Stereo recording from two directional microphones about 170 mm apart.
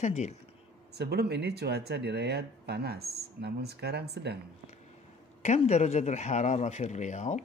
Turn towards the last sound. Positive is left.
turn(degrees=45)  # may be behind; listen again after turning